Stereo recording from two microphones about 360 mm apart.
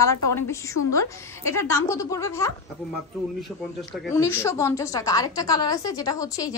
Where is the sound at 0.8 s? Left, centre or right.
Left.